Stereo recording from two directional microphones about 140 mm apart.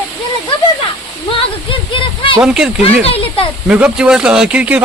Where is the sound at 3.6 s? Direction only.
5° right (ahead or behind).